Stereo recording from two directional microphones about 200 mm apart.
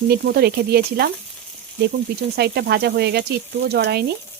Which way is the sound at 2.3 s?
55° right (ahead or behind).